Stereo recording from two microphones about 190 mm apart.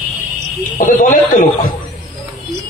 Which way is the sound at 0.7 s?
40° left (ahead or behind).